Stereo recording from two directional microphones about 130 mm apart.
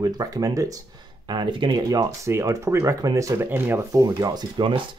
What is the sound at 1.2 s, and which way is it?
Speech, 35° right (ahead or behind).